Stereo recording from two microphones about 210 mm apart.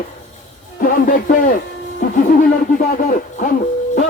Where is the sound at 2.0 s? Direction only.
35° left (ahead or behind).